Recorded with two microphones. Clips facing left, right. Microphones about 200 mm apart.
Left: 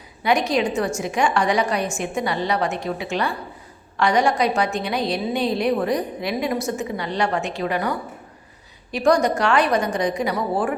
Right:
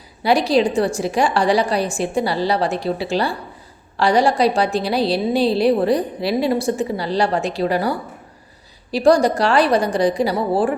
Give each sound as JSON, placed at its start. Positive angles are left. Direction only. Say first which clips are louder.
{"t": 0.2, "sound": "a woman's voice", "louder": "right 4 dB", "side_deg": -35}